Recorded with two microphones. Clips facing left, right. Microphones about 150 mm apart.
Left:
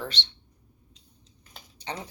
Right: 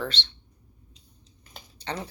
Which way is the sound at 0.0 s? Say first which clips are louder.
Right 3 dB; 15° left (ahead or behind).